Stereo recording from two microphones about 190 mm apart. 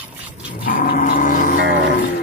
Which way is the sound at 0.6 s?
50° left (ahead or behind).